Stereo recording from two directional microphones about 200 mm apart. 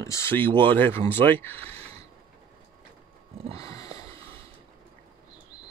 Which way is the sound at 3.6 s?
15° left (ahead or behind).